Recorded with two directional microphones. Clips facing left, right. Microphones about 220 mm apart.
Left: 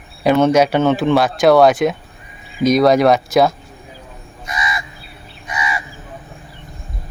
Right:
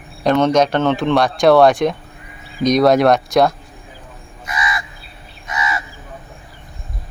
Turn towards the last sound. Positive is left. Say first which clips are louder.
# right 1 dB
turn(degrees=15)  # may be behind; listen again after turning